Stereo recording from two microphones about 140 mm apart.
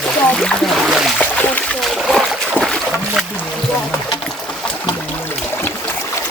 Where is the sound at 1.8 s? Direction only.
Centre (ahead or behind).